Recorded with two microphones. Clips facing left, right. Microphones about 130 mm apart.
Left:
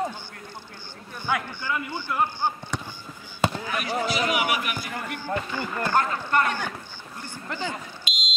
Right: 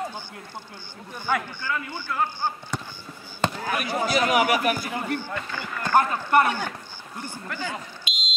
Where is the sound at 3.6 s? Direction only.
45° right (ahead or behind).